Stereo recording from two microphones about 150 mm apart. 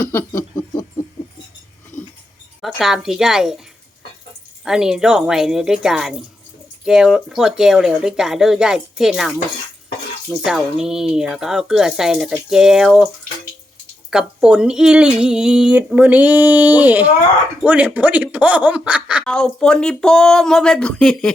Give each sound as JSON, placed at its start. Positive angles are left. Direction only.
{"t": 0.5, "sound": "a sound", "side_deg": 30}
{"t": 2.6, "sound": "a woman's voice", "side_deg": 0}
{"t": 4.6, "sound": "speech", "side_deg": -5}
{"t": 14.1, "sound": "speech", "side_deg": -5}
{"t": 19.2, "sound": "speech", "side_deg": 5}